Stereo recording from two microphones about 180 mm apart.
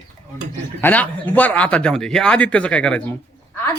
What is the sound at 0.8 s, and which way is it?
A man's voice, 10° left (ahead or behind).